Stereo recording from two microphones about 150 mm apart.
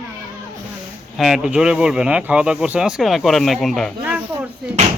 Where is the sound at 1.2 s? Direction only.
5° right (ahead or behind).